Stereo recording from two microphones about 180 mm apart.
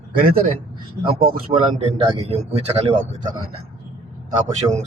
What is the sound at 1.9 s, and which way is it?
A man's voice, 35° right (ahead or behind).